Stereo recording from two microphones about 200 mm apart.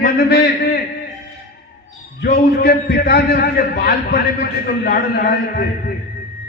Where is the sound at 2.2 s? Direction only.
50° left (ahead or behind).